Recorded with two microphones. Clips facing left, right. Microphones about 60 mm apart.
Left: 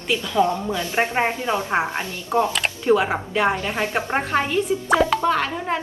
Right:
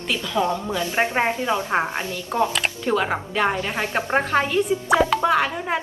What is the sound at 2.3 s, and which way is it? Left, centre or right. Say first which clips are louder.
A woman's voice: left 2 dB; centre.